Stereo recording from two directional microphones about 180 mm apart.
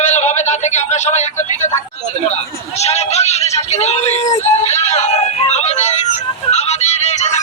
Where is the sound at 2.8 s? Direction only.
35° left (ahead or behind).